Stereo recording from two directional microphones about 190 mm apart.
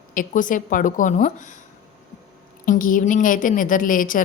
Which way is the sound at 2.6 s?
45° left (ahead or behind).